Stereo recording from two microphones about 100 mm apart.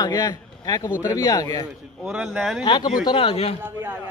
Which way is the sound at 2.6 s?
45° left (ahead or behind).